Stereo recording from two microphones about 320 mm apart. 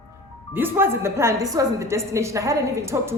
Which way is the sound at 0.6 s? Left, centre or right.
Centre.